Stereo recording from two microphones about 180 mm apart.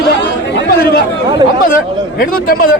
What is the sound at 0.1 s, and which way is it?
Chatter, 75° left (ahead or behind).